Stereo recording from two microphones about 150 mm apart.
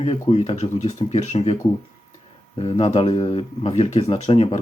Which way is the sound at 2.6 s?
40° left (ahead or behind).